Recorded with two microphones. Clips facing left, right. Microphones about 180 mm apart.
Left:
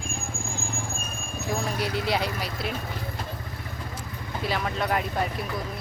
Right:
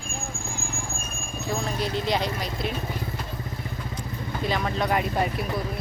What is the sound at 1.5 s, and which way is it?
Speech, 10° left (ahead or behind).